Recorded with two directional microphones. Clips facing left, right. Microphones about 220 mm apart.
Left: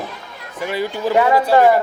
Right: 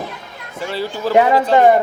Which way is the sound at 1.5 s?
20° right (ahead or behind).